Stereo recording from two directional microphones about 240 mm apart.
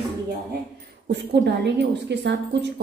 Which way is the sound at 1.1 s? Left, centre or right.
Right.